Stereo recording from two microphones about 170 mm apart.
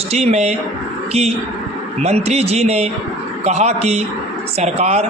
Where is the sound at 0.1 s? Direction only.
40° right (ahead or behind).